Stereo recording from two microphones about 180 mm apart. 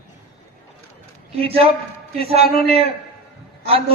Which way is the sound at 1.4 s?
30° right (ahead or behind).